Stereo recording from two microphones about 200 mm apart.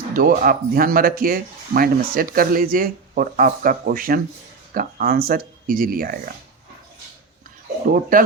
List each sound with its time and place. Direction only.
0.1 s speech: 45° right (ahead or behind)
8.1 s speech: 45° right (ahead or behind)